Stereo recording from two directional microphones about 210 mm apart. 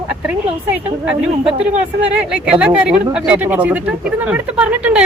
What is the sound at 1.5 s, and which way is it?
Speech, 30° right (ahead or behind).